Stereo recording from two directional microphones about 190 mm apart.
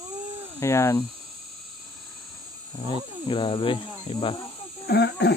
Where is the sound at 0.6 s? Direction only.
15° left (ahead or behind).